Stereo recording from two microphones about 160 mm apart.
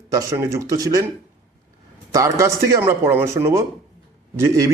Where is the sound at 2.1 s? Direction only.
20° right (ahead or behind).